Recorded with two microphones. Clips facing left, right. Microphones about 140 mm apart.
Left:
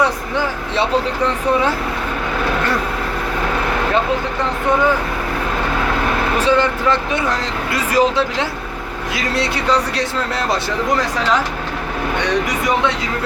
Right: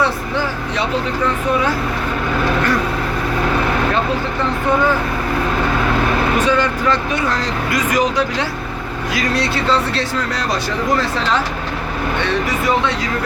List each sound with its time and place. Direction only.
6.4 s speech: 25° left (ahead or behind)